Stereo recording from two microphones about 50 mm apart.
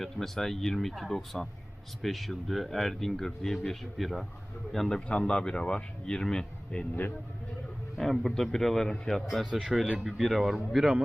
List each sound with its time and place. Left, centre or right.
0.0 s speech: centre
4.9 s speech: left
7.9 s speech: centre
9.5 s speech: centre
10.0 s speech: centre